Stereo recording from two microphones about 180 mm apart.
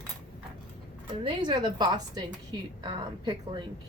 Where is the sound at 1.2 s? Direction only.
25° right (ahead or behind).